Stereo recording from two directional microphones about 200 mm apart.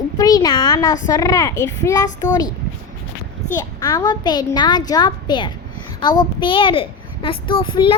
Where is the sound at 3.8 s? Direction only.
15° left (ahead or behind).